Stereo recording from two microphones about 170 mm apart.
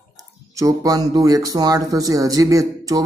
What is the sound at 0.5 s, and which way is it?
Speech, 20° right (ahead or behind).